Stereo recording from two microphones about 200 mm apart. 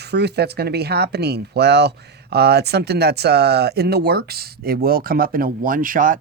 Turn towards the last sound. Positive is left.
turn(degrees=-40)  # may be behind; listen again after turning